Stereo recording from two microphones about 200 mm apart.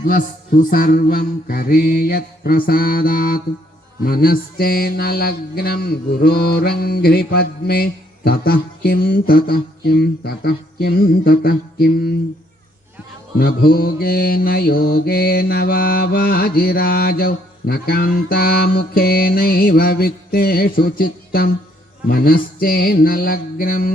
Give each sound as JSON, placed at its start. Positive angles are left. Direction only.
{"t": 0.0, "sound": "mantra", "side_deg": 45}
{"t": 13.4, "sound": "mantra", "side_deg": 50}